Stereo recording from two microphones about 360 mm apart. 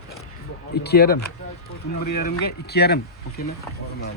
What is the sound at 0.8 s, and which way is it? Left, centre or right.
Speech, left.